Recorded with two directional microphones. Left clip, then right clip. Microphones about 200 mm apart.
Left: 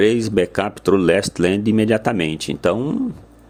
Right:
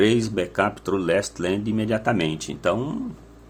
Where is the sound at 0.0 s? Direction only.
35° left (ahead or behind).